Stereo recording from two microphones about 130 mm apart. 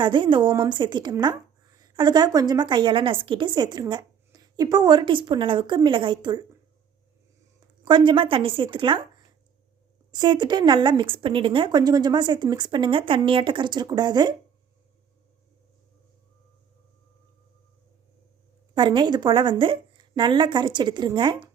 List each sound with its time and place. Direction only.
0.0 s a woman's voice: 40° right (ahead or behind)
7.9 s a woman's voice: 40° right (ahead or behind)
10.1 s a woman's voice: 35° right (ahead or behind)
18.7 s a woman's voice: 35° right (ahead or behind)